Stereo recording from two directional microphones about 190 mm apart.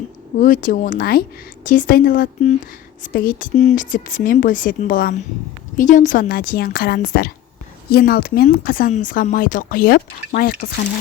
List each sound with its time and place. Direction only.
0.3 s speech: 45° left (ahead or behind)